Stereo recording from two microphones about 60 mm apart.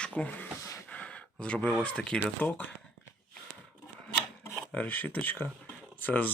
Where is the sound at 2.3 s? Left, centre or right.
Left.